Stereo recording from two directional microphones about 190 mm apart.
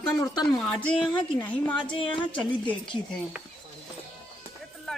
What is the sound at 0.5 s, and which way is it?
Speech, 5° left (ahead or behind).